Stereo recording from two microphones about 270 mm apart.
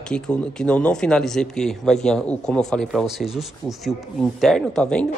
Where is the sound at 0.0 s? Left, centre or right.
Centre.